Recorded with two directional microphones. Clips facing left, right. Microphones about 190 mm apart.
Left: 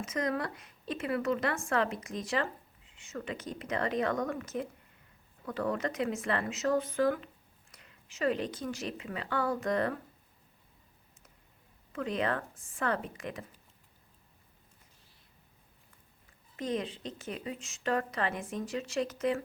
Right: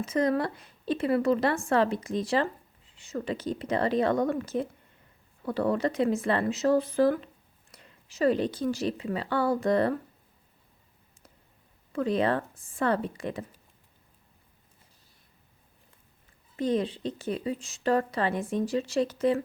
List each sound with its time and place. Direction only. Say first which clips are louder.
0.0 s a woman's voice: right 7 dB; 30° right (ahead or behind)
11.9 s a woman's voice: right 6 dB; 35° right (ahead or behind)
16.6 s a woman's voice: right 7 dB; 30° right (ahead or behind)